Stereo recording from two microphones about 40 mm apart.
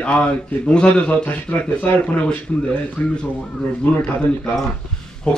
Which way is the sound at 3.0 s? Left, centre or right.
Left.